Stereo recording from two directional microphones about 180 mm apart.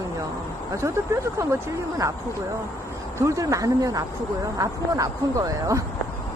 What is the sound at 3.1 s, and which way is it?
Speech, 15° right (ahead or behind).